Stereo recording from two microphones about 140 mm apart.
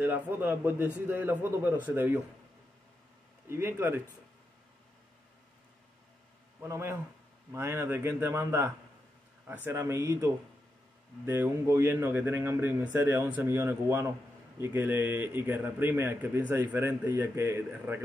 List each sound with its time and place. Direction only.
0.0 s a man's voice: 15° right (ahead or behind)
3.4 s a man's voice: 15° right (ahead or behind)
6.6 s a man's voice: 20° right (ahead or behind)